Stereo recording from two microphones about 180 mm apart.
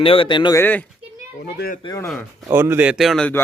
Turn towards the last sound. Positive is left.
turn(degrees=5)  # may be behind; listen again after turning